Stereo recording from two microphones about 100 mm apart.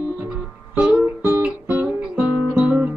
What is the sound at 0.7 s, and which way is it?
Guitar, 15° right (ahead or behind).